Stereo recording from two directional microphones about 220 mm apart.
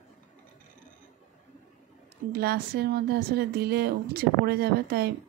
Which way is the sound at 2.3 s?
45° right (ahead or behind).